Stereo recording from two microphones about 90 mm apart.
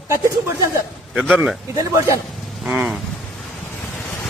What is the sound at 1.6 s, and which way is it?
Speech, 35° right (ahead or behind).